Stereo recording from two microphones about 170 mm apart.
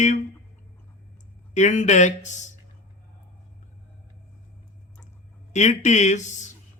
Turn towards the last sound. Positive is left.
turn(degrees=45)  # may be behind; listen again after turning